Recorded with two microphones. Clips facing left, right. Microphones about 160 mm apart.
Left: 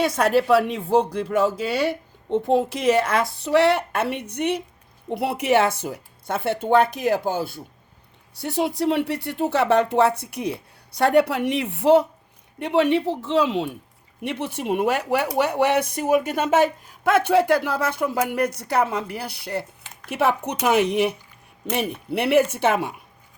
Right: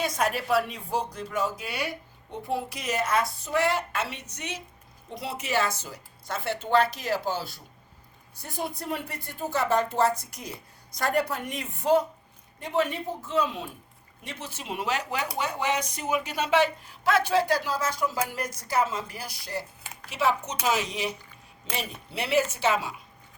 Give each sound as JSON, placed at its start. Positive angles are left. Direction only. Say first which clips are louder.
{"t": 0.0, "sound": "speech", "louder": "left 8 dB", "side_deg": 70}
{"t": 8.4, "sound": "speech", "louder": "left 11 dB", "side_deg": 80}
{"t": 14.2, "sound": "speech", "louder": "left 12 dB", "side_deg": 65}
{"t": 19.8, "sound": "a sound", "louder": "right 1 dB", "side_deg": -10}
{"t": 20.1, "sound": "speech", "louder": "left 5 dB", "side_deg": 60}